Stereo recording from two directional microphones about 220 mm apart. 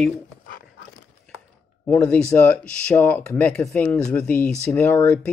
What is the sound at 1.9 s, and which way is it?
Speech, 5° left (ahead or behind).